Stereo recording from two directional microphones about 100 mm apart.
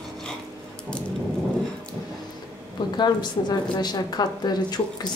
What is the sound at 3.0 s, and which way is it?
A woman's voice, 45° left (ahead or behind).